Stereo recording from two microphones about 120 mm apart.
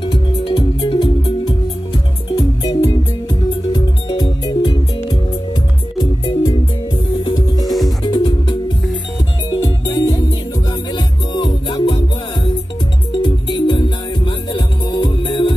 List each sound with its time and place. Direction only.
0.0 s music: 40° left (ahead or behind)
7.6 s music: centre (ahead or behind)
8.0 s music: 40° left (ahead or behind)
13.1 s music: 40° left (ahead or behind)